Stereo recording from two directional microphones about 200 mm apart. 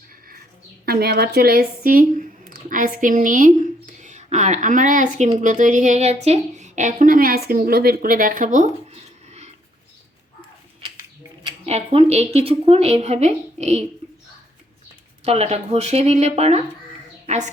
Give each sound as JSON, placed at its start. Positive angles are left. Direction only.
{"t": 0.9, "sound": "speech", "side_deg": -50}
{"t": 11.4, "sound": "speech", "side_deg": -30}
{"t": 15.2, "sound": "speech", "side_deg": -30}
{"t": 17.2, "sound": "a sound", "side_deg": -35}